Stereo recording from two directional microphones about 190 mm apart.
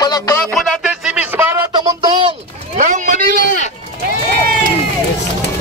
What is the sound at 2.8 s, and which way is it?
Vehicle, 40° right (ahead or behind).